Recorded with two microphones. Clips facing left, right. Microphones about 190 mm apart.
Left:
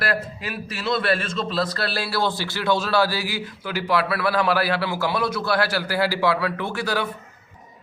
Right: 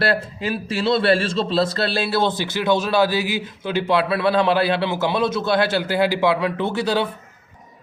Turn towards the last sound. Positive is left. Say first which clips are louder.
# right 5 dB
turn(degrees=-25)  # may be behind; listen again after turning